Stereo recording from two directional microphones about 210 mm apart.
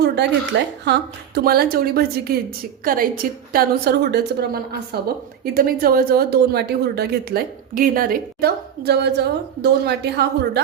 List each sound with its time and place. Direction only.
0.5 s a woman's voice: 55° right (ahead or behind)